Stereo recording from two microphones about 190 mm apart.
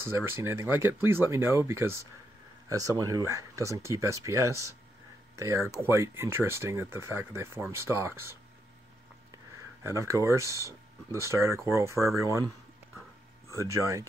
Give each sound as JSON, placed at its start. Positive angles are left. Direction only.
{"t": 0.1, "sound": "speech", "side_deg": -10}
{"t": 9.8, "sound": "speech", "side_deg": -15}
{"t": 13.6, "sound": "speech", "side_deg": -15}